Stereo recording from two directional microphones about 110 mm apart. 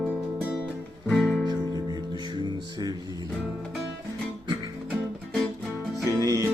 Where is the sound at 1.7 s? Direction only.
40° right (ahead or behind).